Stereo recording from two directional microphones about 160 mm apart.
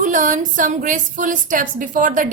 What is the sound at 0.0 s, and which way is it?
A woman's voice, 55° right (ahead or behind).